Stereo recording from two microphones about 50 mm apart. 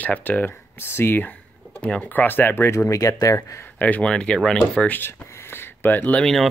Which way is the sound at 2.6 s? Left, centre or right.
Left.